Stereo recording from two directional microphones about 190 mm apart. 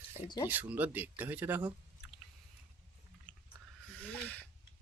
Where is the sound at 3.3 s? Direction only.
45° left (ahead or behind).